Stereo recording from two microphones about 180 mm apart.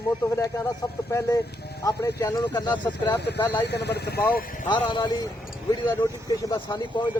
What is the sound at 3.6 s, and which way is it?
Speech, 70° left (ahead or behind).